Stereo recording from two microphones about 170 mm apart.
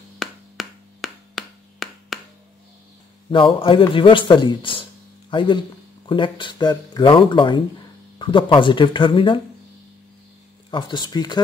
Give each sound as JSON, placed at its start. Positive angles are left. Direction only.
{"t": 0.2, "sound": "a sound", "side_deg": 0}
{"t": 3.3, "sound": "a man's voice", "side_deg": 30}
{"t": 10.7, "sound": "a man's voice", "side_deg": 25}